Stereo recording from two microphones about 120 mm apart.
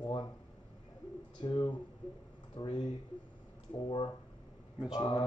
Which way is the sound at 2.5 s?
50° left (ahead or behind).